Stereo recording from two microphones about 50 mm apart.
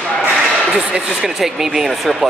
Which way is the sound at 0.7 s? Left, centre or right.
Centre.